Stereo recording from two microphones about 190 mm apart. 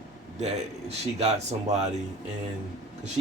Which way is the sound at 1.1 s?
30° right (ahead or behind).